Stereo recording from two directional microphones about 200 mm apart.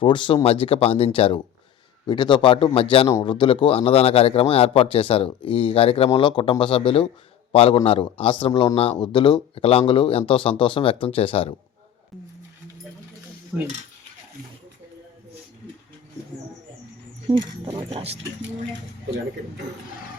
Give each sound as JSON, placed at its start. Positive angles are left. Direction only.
{"t": 0.0, "sound": "a man's voice", "side_deg": 25}
{"t": 13.5, "sound": "cutlery", "side_deg": 5}
{"t": 17.2, "sound": "speech", "side_deg": -25}